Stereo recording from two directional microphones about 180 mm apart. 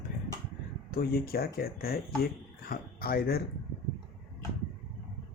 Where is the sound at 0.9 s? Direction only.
55° left (ahead or behind).